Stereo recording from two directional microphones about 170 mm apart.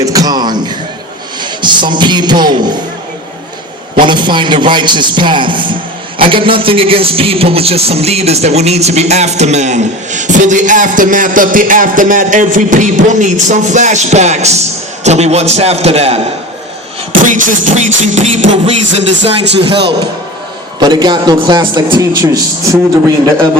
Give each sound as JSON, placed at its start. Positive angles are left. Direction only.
{"t": 0.0, "sound": "music", "side_deg": -20}
{"t": 1.6, "sound": "a man's voice", "side_deg": -25}
{"t": 4.0, "sound": "a man's voice", "side_deg": -25}
{"t": 17.2, "sound": "music", "side_deg": -50}
{"t": 18.9, "sound": "speech", "side_deg": -90}
{"t": 20.7, "sound": "a man's voice", "side_deg": -25}